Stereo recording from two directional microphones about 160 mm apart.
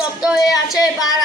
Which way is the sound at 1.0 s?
25° left (ahead or behind).